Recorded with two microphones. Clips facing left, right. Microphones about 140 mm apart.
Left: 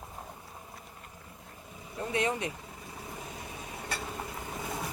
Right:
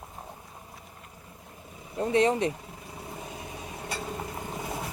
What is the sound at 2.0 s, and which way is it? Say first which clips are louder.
Speech: right 7 dB; 35° right (ahead or behind).